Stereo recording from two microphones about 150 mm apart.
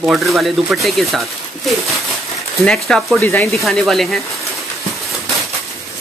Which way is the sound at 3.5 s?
Centre (ahead or behind).